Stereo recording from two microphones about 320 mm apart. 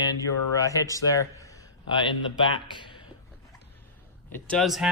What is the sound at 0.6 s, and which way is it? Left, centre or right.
Speech, centre.